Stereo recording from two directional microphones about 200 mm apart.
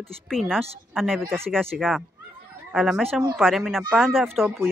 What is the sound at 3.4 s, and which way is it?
Speech, centre (ahead or behind).